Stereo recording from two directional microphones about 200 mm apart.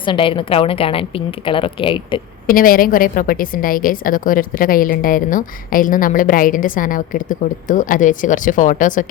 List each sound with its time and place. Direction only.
0.0 s a woman's voice: 25° left (ahead or behind)
2.5 s a woman's voice: 45° left (ahead or behind)